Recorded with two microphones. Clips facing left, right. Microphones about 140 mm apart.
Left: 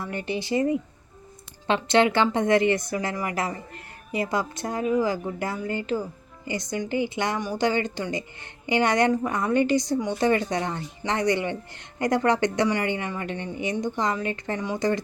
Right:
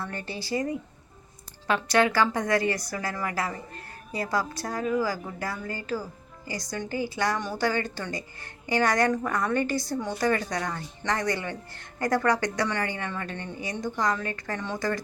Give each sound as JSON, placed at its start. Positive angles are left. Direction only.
{"t": 0.0, "sound": "a woman's voice", "side_deg": 15}